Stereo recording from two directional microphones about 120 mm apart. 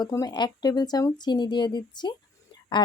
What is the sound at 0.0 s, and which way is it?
Speech, 30° left (ahead or behind).